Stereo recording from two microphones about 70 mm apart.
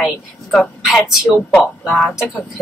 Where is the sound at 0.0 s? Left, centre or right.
Centre.